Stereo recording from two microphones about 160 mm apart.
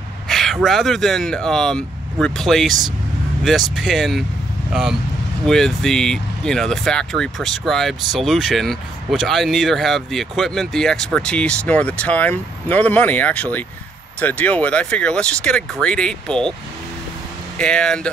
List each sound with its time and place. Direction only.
0.3 s speech: centre (ahead or behind)
5.4 s speech: 5° left (ahead or behind)
17.6 s speech: 5° left (ahead or behind)